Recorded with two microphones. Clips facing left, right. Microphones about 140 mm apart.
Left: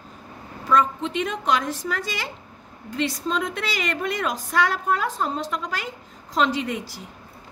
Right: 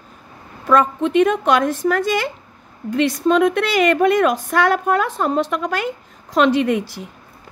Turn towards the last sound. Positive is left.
turn(degrees=-60)  # may be behind; listen again after turning